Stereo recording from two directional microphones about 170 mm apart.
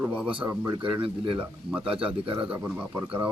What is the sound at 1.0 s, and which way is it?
Speech, 30° right (ahead or behind).